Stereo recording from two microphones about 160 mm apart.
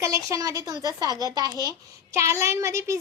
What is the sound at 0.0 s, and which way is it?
A child's voice, 20° right (ahead or behind).